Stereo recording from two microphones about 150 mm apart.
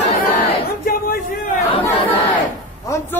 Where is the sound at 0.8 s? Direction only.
80° left.